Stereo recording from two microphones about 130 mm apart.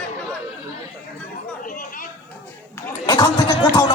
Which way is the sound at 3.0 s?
25° left (ahead or behind).